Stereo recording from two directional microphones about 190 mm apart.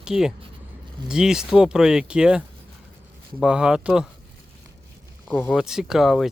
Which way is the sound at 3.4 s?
5° right (ahead or behind).